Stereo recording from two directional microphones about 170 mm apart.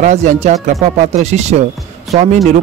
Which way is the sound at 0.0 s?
45° right (ahead or behind).